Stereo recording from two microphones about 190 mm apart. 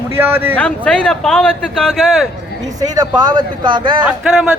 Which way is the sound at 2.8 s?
20° right (ahead or behind).